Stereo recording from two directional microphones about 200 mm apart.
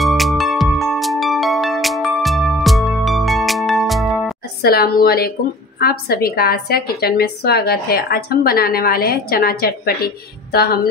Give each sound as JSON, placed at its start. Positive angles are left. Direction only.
{"t": 0.0, "sound": "music", "side_deg": 0}
{"t": 4.6, "sound": "a woman's voice", "side_deg": 50}